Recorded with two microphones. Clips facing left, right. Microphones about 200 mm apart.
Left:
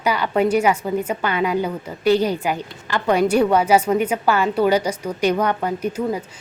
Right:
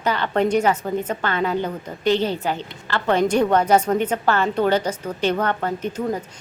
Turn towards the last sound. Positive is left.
turn(degrees=10)  # may be behind; listen again after turning